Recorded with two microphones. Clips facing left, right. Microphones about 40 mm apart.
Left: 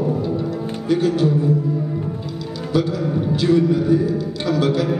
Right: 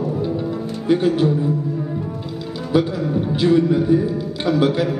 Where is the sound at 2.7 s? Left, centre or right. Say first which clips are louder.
Right 1 dB; centre.